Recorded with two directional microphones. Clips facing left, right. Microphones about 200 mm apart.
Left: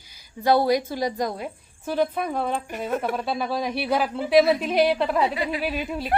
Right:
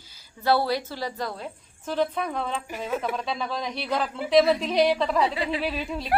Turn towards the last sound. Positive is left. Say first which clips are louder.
# left 2 dB
turn(degrees=5)  # may be behind; listen again after turning